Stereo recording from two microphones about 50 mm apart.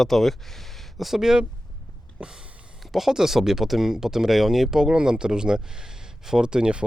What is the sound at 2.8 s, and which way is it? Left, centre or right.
Speech, centre.